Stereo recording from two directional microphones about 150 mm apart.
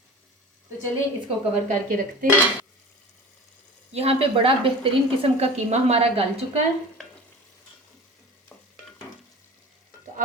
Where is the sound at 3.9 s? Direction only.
40° right (ahead or behind).